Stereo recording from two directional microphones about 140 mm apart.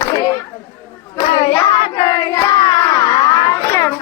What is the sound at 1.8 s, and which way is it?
Child singing, 35° left (ahead or behind).